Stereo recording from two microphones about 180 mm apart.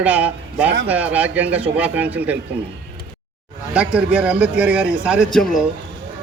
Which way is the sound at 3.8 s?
5° right (ahead or behind).